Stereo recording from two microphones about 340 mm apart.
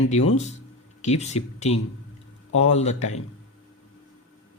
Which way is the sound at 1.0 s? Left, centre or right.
Centre.